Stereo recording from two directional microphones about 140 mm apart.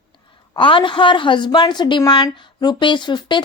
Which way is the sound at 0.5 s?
35° left (ahead or behind).